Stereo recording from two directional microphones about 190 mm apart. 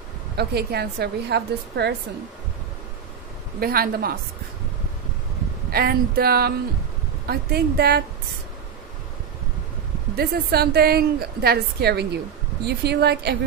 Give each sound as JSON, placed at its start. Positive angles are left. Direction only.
{"t": 0.4, "sound": "a woman's voice", "side_deg": -55}
{"t": 3.5, "sound": "a woman's voice", "side_deg": -50}
{"t": 5.7, "sound": "a woman's voice", "side_deg": -55}
{"t": 10.1, "sound": "a woman's voice", "side_deg": -55}